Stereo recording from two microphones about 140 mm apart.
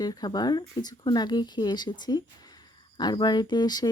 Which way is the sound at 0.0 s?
30° left (ahead or behind).